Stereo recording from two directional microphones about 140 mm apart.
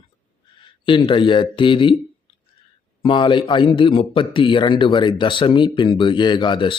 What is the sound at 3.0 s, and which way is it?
Speech, 35° left (ahead or behind).